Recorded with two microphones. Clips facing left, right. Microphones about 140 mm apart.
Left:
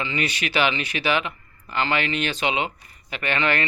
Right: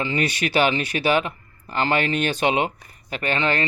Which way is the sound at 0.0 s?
40° right (ahead or behind).